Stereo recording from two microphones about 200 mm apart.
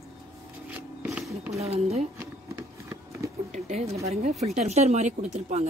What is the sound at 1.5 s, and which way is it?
Speech, 30° right (ahead or behind).